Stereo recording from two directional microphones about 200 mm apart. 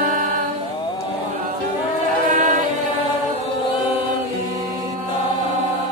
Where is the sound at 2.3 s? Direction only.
40° right (ahead or behind).